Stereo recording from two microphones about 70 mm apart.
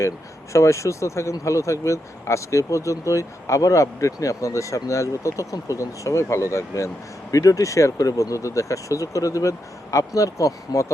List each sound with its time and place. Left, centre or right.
0.5 s speech: left